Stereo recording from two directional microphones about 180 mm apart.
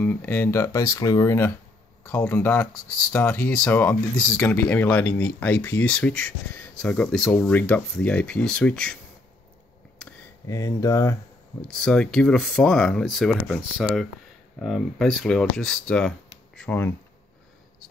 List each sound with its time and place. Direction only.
0.0 s speech: 10° left (ahead or behind)
10.4 s speech: 20° left (ahead or behind)
11.6 s speech: 5° left (ahead or behind)